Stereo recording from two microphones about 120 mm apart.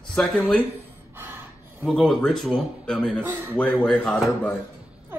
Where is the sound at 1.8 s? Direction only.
5° left (ahead or behind).